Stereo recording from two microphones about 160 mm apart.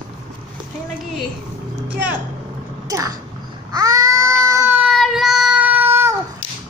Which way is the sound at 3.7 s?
25° right (ahead or behind).